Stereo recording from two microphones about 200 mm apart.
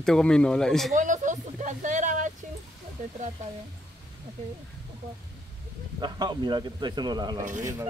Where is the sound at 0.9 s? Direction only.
40° right (ahead or behind).